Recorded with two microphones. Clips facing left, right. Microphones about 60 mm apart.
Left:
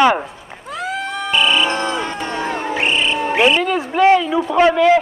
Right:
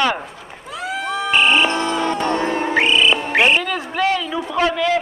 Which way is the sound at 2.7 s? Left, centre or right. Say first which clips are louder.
Right 3 dB; right.